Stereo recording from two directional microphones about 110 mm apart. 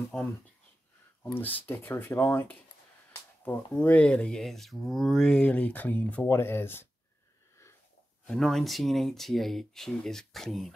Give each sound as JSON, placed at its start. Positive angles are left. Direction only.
{"t": 0.1, "sound": "speech", "side_deg": 5}
{"t": 1.2, "sound": "speech", "side_deg": 20}
{"t": 8.3, "sound": "speech", "side_deg": 5}